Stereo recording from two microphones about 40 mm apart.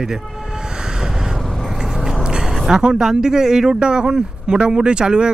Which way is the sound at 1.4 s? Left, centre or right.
Centre.